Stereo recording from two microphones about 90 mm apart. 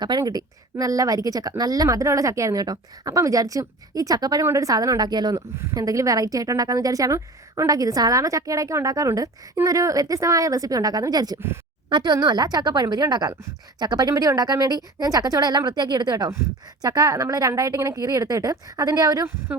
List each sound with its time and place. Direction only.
0.0 s a woman's voice: 50° right (ahead or behind)